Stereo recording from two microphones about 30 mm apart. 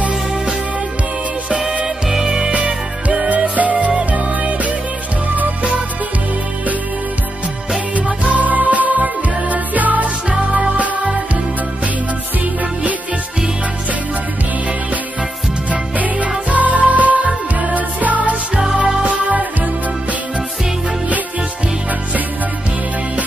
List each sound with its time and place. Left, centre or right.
2.2 s music: right
4.1 s music: right
7.9 s music: right
15.7 s music: right